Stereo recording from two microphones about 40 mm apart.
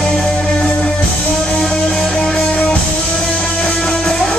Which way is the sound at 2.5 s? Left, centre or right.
Left.